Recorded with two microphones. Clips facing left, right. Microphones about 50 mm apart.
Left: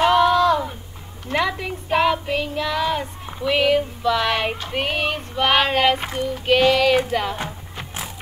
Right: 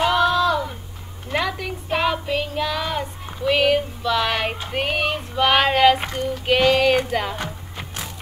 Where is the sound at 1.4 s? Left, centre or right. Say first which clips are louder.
Left 1 dB; left.